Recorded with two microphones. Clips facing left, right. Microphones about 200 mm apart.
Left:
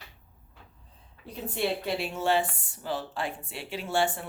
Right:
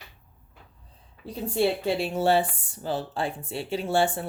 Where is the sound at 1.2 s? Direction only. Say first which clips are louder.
Right 6 dB; 30° right (ahead or behind).